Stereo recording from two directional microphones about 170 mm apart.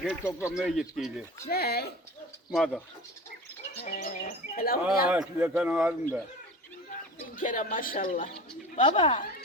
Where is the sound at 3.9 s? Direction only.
55° left (ahead or behind).